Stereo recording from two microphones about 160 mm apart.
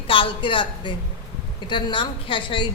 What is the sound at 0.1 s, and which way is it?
A woman's voice, 30° left (ahead or behind).